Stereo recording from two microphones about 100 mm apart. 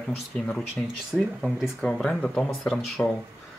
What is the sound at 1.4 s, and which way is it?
Speech, 5° left (ahead or behind).